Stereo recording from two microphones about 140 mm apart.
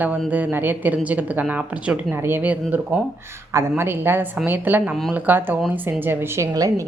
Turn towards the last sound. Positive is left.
turn(degrees=-25)  # may be behind; listen again after turning